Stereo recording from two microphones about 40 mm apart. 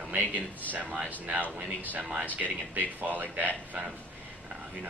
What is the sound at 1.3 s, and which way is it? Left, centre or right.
Speech, right.